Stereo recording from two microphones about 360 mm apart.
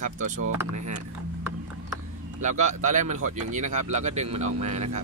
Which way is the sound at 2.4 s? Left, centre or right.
Centre.